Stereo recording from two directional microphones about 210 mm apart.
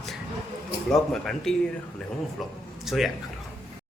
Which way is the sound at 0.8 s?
Centre (ahead or behind).